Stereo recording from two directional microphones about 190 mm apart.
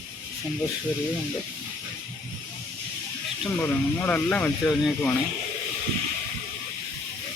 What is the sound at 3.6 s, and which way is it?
Speech, 10° left (ahead or behind).